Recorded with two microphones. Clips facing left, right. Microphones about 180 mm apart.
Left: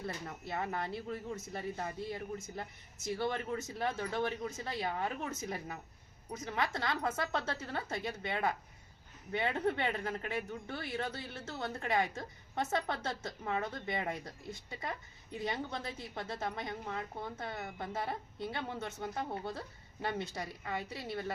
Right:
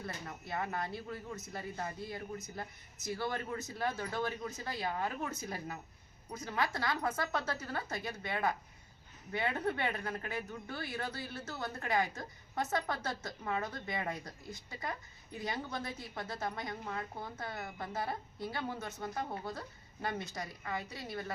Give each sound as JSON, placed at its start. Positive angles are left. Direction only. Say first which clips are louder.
{"t": 0.0, "sound": "speech", "louder": "left 2 dB", "side_deg": 25}